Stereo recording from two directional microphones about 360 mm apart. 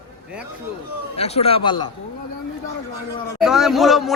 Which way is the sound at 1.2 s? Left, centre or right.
Centre.